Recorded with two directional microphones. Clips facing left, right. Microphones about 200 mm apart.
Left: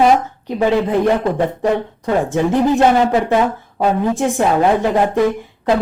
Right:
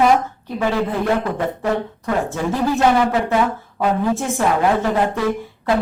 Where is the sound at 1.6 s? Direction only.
20° left (ahead or behind).